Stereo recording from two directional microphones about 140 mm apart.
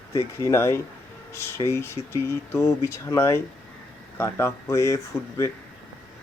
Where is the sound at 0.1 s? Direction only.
20° left (ahead or behind).